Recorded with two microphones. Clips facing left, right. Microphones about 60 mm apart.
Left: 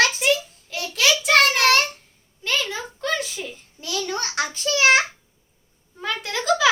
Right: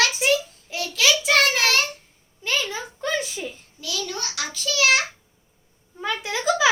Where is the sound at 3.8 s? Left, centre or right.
Left.